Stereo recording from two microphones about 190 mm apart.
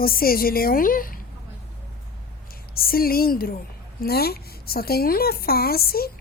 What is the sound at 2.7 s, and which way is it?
A woman's voice, 50° left (ahead or behind).